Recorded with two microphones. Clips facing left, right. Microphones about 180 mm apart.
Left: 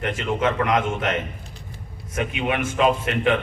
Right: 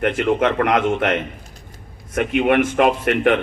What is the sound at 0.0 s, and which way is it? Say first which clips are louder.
A man's voice: right 5 dB; 60° right (ahead or behind).